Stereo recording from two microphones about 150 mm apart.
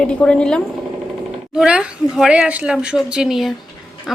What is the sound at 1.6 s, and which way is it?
Speech, 5° right (ahead or behind).